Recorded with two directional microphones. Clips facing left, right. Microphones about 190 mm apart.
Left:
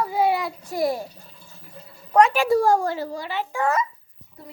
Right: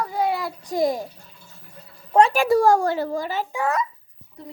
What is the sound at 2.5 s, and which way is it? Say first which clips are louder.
A child's voice: right 2 dB; 75° right (ahead or behind).